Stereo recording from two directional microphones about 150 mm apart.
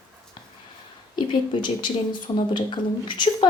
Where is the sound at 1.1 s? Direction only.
30° left (ahead or behind).